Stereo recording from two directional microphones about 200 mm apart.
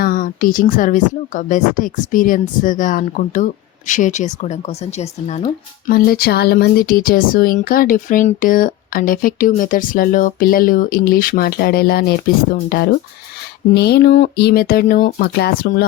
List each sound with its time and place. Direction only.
0.0 s a woman's voice: 45° left (ahead or behind)
5.9 s speech: 50° left (ahead or behind)